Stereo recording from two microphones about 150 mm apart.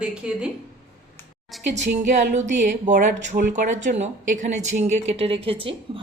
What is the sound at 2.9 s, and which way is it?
Speech, 55° right (ahead or behind).